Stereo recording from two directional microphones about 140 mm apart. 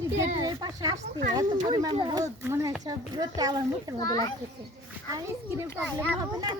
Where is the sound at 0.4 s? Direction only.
30° right (ahead or behind).